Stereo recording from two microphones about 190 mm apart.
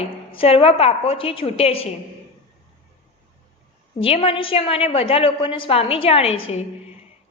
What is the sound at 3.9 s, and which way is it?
A woman's voice, 30° left (ahead or behind).